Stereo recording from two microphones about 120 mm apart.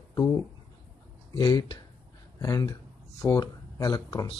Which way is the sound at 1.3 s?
35° left (ahead or behind).